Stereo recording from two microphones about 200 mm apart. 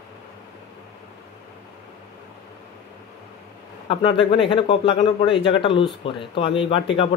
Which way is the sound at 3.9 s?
25° left (ahead or behind).